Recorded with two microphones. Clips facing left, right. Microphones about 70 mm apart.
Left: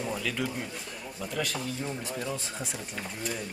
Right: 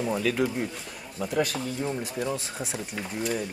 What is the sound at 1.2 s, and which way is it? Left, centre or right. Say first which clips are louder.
Speech: right 6 dB; centre.